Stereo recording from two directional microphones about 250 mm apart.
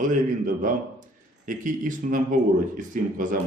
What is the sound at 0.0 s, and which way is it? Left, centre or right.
A man's voice, right.